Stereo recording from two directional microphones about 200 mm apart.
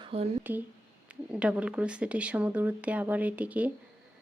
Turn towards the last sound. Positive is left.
turn(degrees=-5)  # may be behind; listen again after turning